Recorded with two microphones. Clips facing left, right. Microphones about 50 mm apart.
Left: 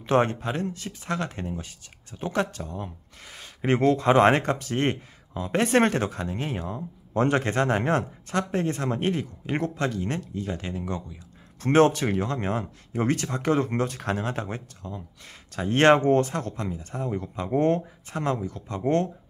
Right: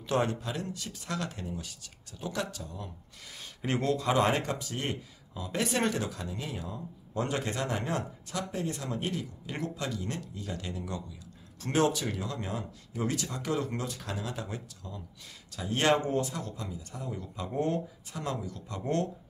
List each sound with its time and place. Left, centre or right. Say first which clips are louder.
0.0 s speech: left 7 dB; left
10.5 s speech: left 4 dB; left
11.6 s speech: left 8 dB; left